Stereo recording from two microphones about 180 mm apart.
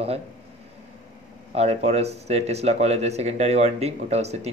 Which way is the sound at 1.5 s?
35° right (ahead or behind).